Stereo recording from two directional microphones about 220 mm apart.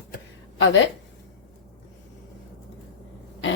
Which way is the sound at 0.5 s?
60° left (ahead or behind).